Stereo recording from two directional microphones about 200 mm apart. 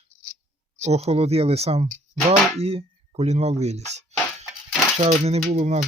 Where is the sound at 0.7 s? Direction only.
35° right (ahead or behind).